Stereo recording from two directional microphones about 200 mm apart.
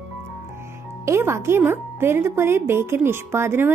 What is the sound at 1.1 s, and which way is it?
A woman's voice, 15° right (ahead or behind).